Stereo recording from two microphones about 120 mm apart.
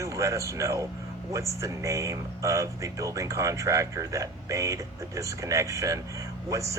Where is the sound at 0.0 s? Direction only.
25° right (ahead or behind).